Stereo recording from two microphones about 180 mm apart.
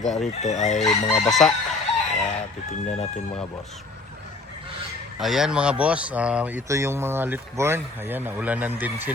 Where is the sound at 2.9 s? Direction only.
40° left (ahead or behind).